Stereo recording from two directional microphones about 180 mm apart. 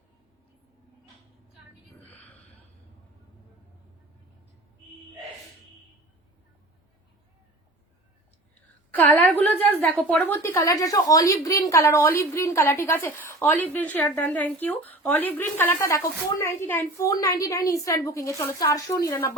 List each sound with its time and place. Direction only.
8.9 s a woman's voice: 10° left (ahead or behind)